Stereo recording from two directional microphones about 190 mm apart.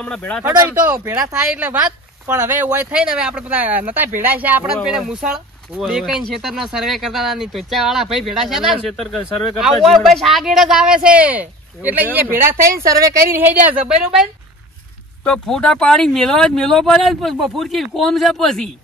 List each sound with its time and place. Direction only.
0.0 s speech: 5° left (ahead or behind)
0.7 s speech: 10° right (ahead or behind)
1.5 s speech: 10° right (ahead or behind)
15.2 s speech: 5° left (ahead or behind)